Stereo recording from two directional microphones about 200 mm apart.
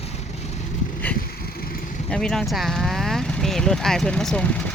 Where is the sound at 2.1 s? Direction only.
5° left (ahead or behind).